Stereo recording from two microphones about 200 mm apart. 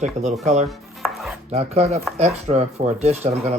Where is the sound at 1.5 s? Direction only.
30° right (ahead or behind).